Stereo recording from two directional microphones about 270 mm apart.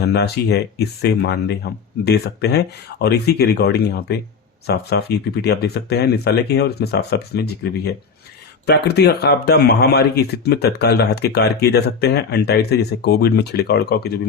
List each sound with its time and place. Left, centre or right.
0.0 s speech: left